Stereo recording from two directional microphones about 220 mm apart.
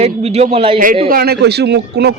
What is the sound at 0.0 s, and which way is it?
Speech, 30° right (ahead or behind).